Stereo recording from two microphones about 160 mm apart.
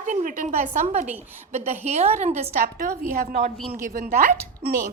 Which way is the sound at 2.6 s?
60° right (ahead or behind).